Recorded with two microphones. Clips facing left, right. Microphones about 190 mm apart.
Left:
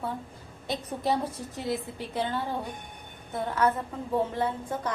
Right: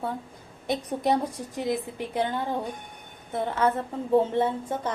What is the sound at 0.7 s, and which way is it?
A woman's voice, 15° right (ahead or behind).